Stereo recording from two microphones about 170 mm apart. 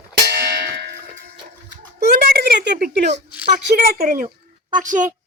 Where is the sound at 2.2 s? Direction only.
65° right (ahead or behind).